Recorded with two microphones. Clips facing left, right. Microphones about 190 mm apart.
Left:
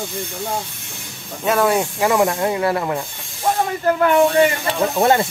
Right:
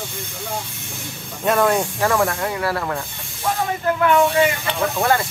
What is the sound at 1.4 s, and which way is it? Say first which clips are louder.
Speech: left 1 dB; 5° left (ahead or behind).